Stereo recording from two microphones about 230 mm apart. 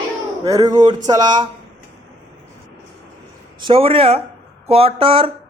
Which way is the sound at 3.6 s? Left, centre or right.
Right.